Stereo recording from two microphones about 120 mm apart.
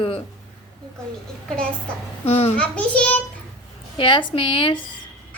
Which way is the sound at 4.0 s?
45° left (ahead or behind).